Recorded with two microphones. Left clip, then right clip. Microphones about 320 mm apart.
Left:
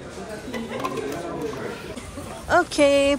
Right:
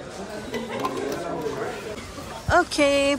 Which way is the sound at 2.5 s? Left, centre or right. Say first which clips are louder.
Left 2 dB; centre.